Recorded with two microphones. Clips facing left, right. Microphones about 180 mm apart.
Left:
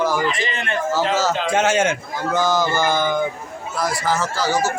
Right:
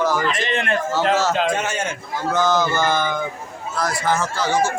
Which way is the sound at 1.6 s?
90° left.